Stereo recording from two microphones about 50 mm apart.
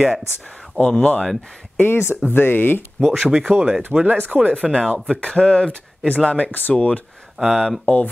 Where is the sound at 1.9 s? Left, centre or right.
Left.